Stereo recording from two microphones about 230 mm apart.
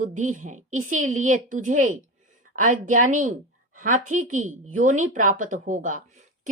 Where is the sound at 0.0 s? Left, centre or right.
Right.